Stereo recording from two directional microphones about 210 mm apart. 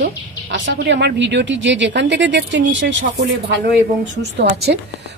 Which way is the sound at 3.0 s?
50° right (ahead or behind).